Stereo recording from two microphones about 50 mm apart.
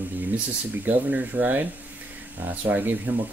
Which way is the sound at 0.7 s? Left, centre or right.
Right.